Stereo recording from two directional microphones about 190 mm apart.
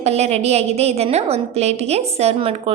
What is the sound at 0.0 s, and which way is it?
A woman's voice, 35° right (ahead or behind).